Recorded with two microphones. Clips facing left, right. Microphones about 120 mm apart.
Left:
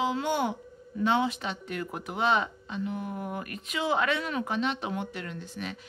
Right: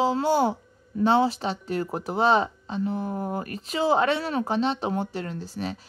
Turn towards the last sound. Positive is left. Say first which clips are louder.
# right 5 dB
turn(degrees=-35)  # may be behind; listen again after turning